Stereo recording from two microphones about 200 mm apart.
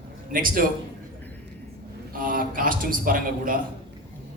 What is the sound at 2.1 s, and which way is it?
A man's voice, 45° right (ahead or behind).